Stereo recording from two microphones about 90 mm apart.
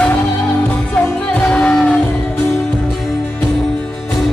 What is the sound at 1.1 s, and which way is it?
Music, 10° left (ahead or behind).